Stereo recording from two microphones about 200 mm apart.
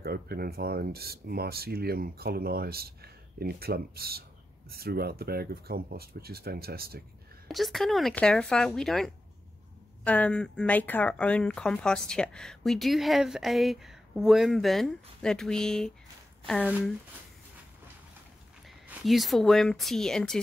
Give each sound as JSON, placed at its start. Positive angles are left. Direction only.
{"t": 0.0, "sound": "speech", "side_deg": -50}
{"t": 7.4, "sound": "speech", "side_deg": 0}
{"t": 18.9, "sound": "speech", "side_deg": 0}